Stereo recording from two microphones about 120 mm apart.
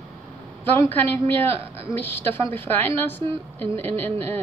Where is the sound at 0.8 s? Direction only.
15° left (ahead or behind).